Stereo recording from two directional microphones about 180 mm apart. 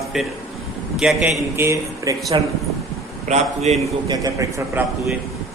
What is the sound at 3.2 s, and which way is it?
Speech, 40° right (ahead or behind).